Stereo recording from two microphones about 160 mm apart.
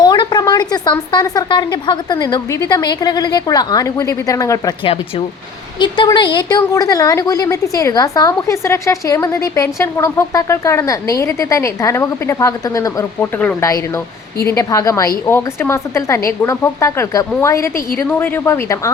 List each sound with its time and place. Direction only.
0.0 s a woman's voice: 25° left (ahead or behind)
4.8 s a woman's voice: 35° left (ahead or behind); by 18.9 s 20° left (ahead or behind)